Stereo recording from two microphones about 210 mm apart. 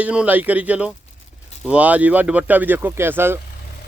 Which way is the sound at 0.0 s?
5° right (ahead or behind).